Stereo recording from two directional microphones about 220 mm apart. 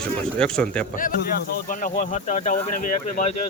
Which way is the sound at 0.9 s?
40° left (ahead or behind).